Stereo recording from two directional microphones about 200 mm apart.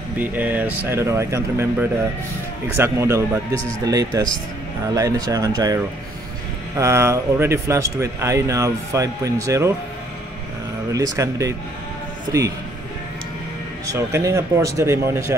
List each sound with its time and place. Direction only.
0.2 s a man's voice: 10° right (ahead or behind)
4.9 s a man's voice: 15° right (ahead or behind)
10.9 s a man's voice: 15° right (ahead or behind)
13.8 s a man's voice: 15° right (ahead or behind)